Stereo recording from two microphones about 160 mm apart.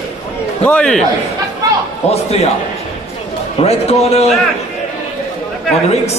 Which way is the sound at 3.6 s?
40° left (ahead or behind).